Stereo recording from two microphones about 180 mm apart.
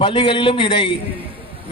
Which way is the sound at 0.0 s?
30° left (ahead or behind).